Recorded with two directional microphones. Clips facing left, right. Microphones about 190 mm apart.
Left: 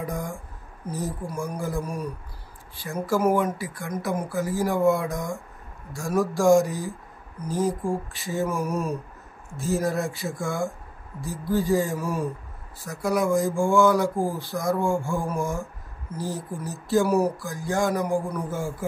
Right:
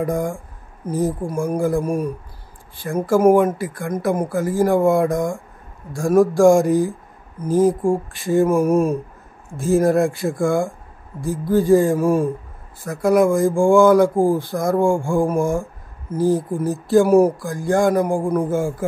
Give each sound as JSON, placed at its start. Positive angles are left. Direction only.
{"t": 0.0, "sound": "speech", "side_deg": -50}